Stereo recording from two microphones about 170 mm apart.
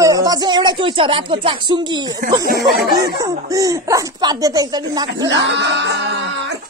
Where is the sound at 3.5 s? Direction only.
20° right (ahead or behind).